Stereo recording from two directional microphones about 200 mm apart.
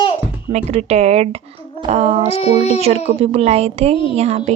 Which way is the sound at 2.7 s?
30° right (ahead or behind).